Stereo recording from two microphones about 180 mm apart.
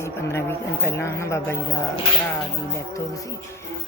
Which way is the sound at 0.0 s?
15° left (ahead or behind).